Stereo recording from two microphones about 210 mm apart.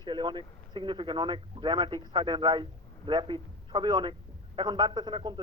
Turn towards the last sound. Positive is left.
turn(degrees=-20)  # may be behind; listen again after turning